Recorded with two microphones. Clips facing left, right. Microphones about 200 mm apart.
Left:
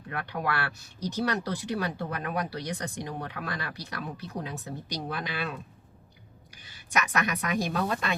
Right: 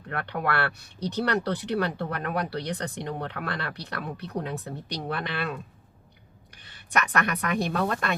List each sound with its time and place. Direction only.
0.1 s a woman's voice: 60° right (ahead or behind)